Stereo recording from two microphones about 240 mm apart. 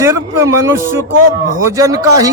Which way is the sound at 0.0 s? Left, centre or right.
Centre.